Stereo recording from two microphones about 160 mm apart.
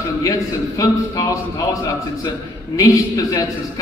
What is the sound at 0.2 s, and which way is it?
A man's voice, 20° left (ahead or behind).